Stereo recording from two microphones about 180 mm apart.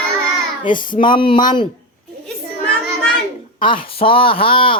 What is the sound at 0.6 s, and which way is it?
Child singing, 50° left (ahead or behind).